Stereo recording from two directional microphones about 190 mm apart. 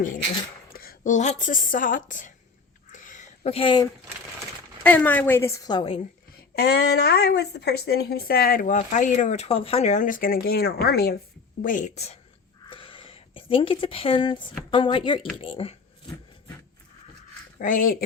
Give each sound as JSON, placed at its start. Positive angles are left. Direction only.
{"t": 0.7, "sound": "a woman's voice", "side_deg": 50}
{"t": 2.9, "sound": "a sound", "side_deg": 40}
{"t": 4.8, "sound": "a woman's voice", "side_deg": 10}
{"t": 6.6, "sound": "speech", "side_deg": 55}
{"t": 11.6, "sound": "a woman's voice", "side_deg": 40}
{"t": 12.6, "sound": "a sound", "side_deg": 25}
{"t": 14.7, "sound": "speech", "side_deg": 25}
{"t": 17.6, "sound": "speech", "side_deg": 45}